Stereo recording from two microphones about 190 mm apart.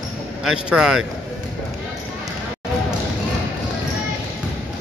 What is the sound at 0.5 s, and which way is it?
Speech, 5° right (ahead or behind).